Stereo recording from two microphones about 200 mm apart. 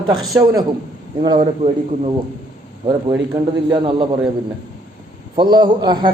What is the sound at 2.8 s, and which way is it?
A man's voice, 20° right (ahead or behind).